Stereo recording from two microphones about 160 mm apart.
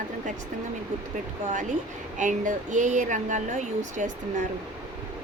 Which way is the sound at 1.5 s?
50° right (ahead or behind).